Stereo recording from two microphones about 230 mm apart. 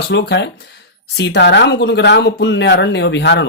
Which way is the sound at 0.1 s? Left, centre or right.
Left.